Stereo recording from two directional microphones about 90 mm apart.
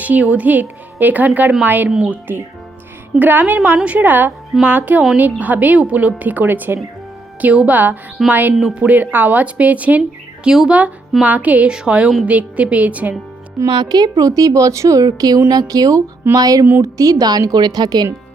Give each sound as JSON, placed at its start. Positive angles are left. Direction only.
{"t": 0.0, "sound": "a woman's voice", "side_deg": -15}
{"t": 13.7, "sound": "a woman's voice", "side_deg": -50}